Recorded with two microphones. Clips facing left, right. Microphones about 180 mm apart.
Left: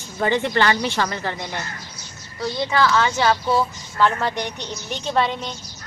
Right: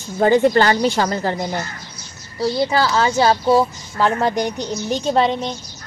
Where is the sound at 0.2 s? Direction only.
45° right (ahead or behind).